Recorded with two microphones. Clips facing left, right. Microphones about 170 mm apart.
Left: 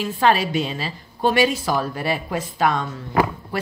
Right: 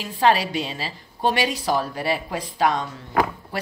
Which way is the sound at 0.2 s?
30° right (ahead or behind).